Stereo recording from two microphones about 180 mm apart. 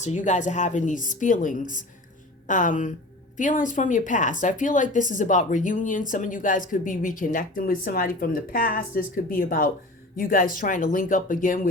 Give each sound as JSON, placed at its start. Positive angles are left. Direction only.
{"t": 0.0, "sound": "speech", "side_deg": 40}